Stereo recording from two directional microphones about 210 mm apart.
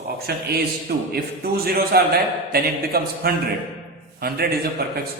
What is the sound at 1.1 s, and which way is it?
A man's voice, 45° right (ahead or behind).